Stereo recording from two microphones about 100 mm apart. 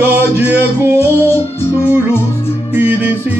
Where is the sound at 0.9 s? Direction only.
25° left (ahead or behind).